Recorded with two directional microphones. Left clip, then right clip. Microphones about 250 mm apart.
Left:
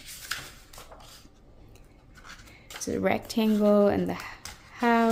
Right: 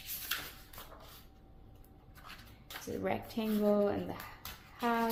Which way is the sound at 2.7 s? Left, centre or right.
Centre.